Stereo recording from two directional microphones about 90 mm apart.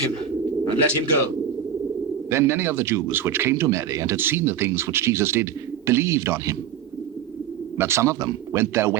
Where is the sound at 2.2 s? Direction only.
30° right (ahead or behind).